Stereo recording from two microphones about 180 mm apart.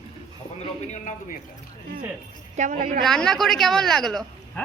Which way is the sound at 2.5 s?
45° right (ahead or behind).